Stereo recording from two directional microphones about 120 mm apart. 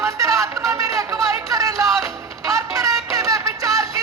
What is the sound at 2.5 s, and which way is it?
Music, 25° right (ahead or behind).